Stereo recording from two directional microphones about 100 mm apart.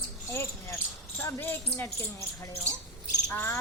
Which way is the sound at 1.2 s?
20° left (ahead or behind).